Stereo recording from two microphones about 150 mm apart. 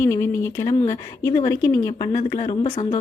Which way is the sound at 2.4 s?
50° left (ahead or behind).